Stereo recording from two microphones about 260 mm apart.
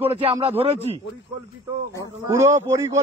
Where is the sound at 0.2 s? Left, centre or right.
Right.